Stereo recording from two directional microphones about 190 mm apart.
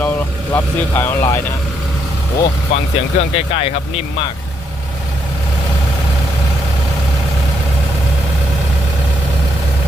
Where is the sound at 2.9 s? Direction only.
30° left (ahead or behind).